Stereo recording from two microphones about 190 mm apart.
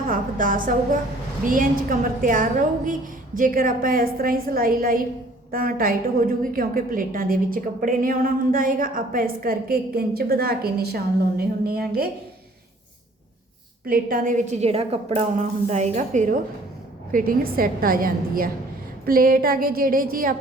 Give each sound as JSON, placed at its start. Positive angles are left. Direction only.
{"t": 0.1, "sound": "a woman's voice", "side_deg": -45}
{"t": 13.8, "sound": "a woman's voice", "side_deg": -50}